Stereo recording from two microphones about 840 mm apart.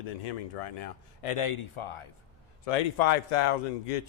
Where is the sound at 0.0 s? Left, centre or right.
Left.